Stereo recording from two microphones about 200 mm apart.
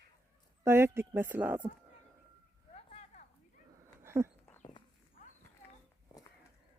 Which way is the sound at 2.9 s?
30° left (ahead or behind).